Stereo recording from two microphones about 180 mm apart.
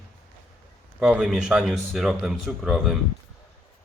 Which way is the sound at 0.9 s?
5° right (ahead or behind).